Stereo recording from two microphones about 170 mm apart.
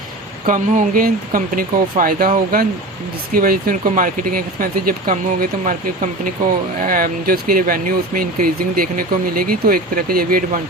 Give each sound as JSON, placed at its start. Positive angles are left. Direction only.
{"t": 0.4, "sound": "speech", "side_deg": -50}
{"t": 6.8, "sound": "speech", "side_deg": -55}